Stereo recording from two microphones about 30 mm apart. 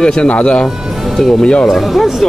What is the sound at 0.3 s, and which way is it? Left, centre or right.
Speech, left.